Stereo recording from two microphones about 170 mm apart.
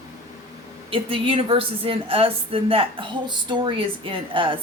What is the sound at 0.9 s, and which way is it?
A woman's voice, 35° right (ahead or behind).